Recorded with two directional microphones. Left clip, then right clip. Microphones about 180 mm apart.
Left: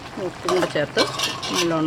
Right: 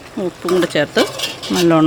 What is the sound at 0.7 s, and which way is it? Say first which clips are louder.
Stir: right 6 dB; 60° right (ahead or behind).